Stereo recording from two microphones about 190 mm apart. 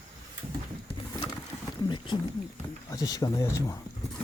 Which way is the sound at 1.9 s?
25° left (ahead or behind).